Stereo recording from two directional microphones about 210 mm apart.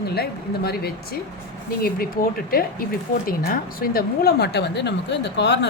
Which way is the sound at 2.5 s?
45° left (ahead or behind).